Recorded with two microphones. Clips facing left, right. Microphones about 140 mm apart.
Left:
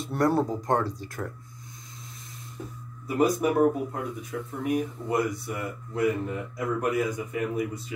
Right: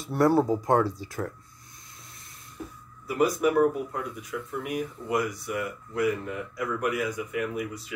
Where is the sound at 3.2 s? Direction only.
25° left (ahead or behind).